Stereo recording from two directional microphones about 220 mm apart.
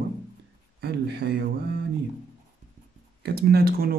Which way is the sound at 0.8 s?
50° right (ahead or behind).